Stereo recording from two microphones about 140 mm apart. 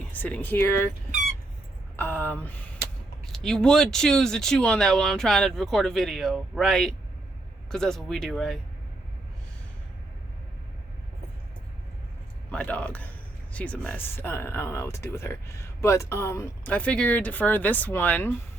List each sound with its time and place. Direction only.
0.1 s speech: 10° left (ahead or behind)
2.0 s speech: 15° left (ahead or behind)
3.2 s speech: 5° left (ahead or behind)
12.5 s speech: 10° left (ahead or behind)
16.7 s speech: 10° left (ahead or behind)